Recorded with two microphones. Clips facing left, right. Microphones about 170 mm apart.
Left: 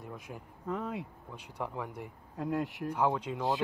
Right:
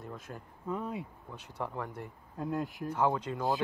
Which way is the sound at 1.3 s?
10° left (ahead or behind).